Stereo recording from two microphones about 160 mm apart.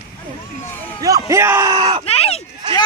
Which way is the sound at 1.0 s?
20° right (ahead or behind).